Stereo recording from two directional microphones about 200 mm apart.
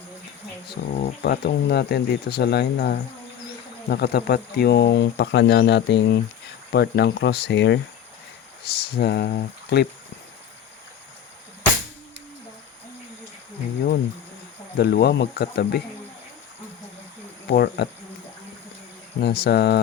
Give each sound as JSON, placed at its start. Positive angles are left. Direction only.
{"t": 0.7, "sound": "speech", "side_deg": 50}
{"t": 14.8, "sound": "speech", "side_deg": 55}
{"t": 17.5, "sound": "speech", "side_deg": 50}
{"t": 19.2, "sound": "speech", "side_deg": 55}